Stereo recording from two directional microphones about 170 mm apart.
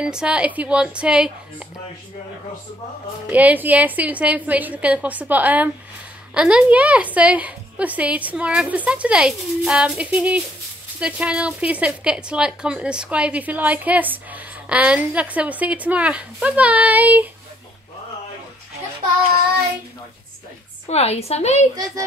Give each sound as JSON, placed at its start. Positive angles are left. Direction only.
{"t": 0.0, "sound": "a woman's voice", "side_deg": -5}
{"t": 3.3, "sound": "speech", "side_deg": -10}
{"t": 20.8, "sound": "a woman's voice", "side_deg": 40}